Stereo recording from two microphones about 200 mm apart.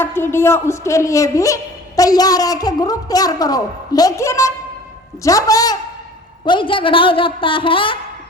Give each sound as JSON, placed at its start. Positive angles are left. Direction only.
{"t": 0.0, "sound": "a woman's voice", "side_deg": 10}